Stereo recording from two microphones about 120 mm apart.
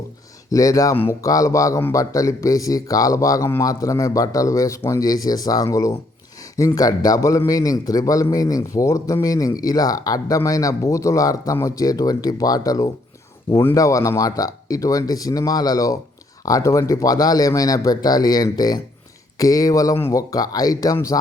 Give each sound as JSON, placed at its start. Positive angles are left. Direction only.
{"t": 0.5, "sound": "a man's voice", "side_deg": 30}